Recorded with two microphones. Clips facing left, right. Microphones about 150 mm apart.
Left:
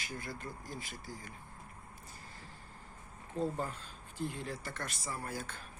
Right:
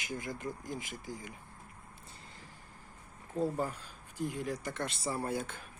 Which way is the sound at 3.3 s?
10° right (ahead or behind).